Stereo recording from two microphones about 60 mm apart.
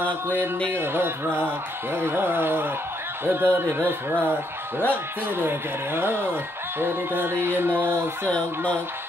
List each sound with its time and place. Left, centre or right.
0.7 s speech: right